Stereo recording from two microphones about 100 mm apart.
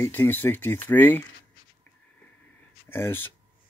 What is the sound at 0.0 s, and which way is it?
Speech, 20° left (ahead or behind).